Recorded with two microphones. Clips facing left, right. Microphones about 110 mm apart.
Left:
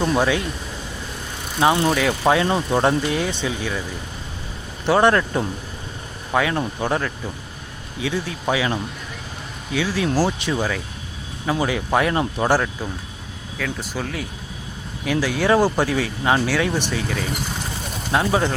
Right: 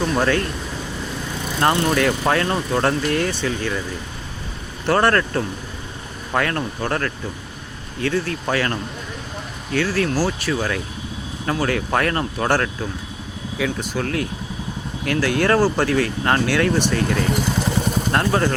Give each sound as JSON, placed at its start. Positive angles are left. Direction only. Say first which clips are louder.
{"t": 0.0, "sound": "speech", "louder": "left 1 dB", "side_deg": 20}
{"t": 1.6, "sound": "speech", "louder": "even", "side_deg": 5}
{"t": 4.9, "sound": "speech", "louder": "left 1 dB", "side_deg": 15}
{"t": 13.6, "sound": "speech", "louder": "right 4 dB", "side_deg": -5}